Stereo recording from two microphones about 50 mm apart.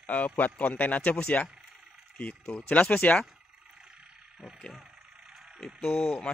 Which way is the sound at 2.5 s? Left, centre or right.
Left.